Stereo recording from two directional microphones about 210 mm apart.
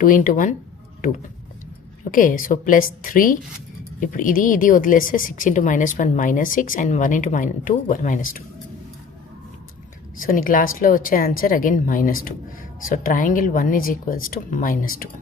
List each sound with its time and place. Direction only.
0.0 s a woman's voice: 40° left (ahead or behind)
2.0 s a woman's voice: 40° left (ahead or behind)
10.2 s a woman's voice: 40° left (ahead or behind)